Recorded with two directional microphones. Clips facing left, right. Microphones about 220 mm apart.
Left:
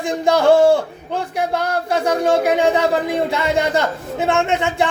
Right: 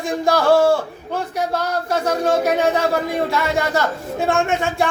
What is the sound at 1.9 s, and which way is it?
Speech, 15° left (ahead or behind).